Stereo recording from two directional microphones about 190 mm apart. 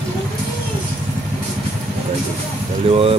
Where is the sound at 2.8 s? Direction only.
30° right (ahead or behind).